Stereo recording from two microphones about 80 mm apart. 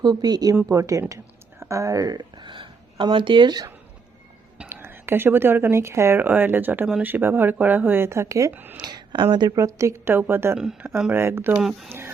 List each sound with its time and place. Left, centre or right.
0.0 s speech: right
0.7 s speech: right
4.7 s a woman's voice: right
8.5 s a woman's voice: right
8.8 s speech: right
9.6 s a woman's voice: right
10.8 s speech: centre
11.1 s a woman's voice: right